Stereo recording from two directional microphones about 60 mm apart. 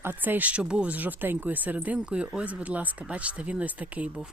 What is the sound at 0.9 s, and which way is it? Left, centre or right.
Speech, right.